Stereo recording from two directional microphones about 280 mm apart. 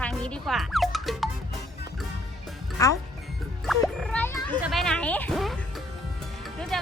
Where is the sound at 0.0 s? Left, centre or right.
Centre.